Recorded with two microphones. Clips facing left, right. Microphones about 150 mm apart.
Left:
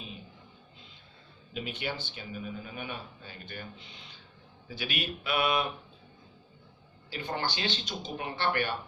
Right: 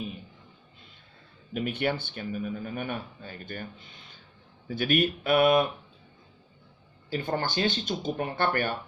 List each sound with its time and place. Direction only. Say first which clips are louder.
1.5 s speech: right 7 dB; 55° right (ahead or behind)
7.1 s speech: right 5 dB; 45° right (ahead or behind)